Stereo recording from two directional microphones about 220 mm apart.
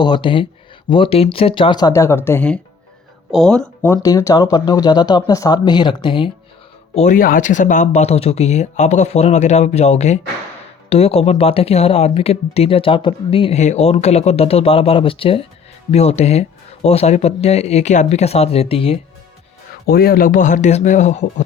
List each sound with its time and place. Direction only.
0.0 s speech: 20° left (ahead or behind)
6.9 s speech: 35° left (ahead or behind)
19.9 s speech: 45° left (ahead or behind)